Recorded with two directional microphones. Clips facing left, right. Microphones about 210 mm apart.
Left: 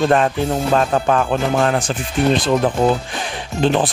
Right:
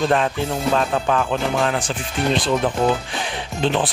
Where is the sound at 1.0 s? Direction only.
45° left (ahead or behind).